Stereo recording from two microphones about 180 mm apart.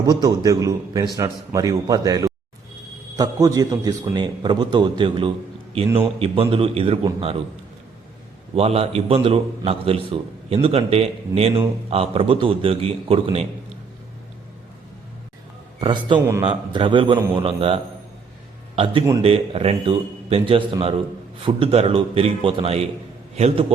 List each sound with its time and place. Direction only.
0.0 s a man's voice: 20° right (ahead or behind)
8.5 s a man's voice: 35° right (ahead or behind)
15.8 s a man's voice: 25° right (ahead or behind)
19.2 s a man's voice: 35° right (ahead or behind)